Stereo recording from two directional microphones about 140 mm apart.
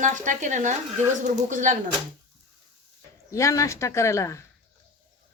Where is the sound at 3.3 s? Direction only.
20° left (ahead or behind).